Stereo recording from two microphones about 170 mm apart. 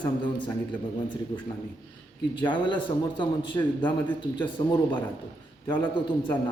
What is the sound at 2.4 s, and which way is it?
Speech, 30° left (ahead or behind).